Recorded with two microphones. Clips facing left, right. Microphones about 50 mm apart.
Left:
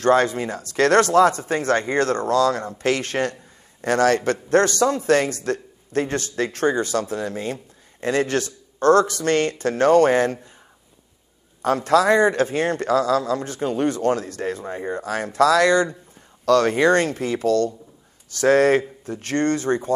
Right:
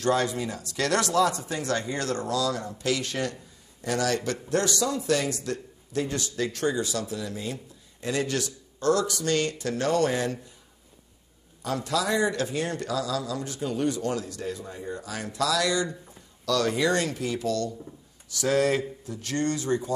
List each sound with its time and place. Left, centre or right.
0.0 s a man's voice: left
11.6 s a man's voice: left